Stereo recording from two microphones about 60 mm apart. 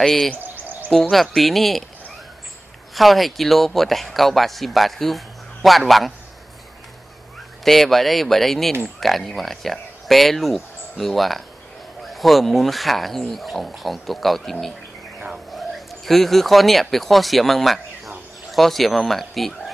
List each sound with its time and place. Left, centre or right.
0.4 s bird: right
1.1 s speech: centre
2.9 s speech: centre
7.6 s speech: centre
15.5 s bird: centre
16.9 s speech: centre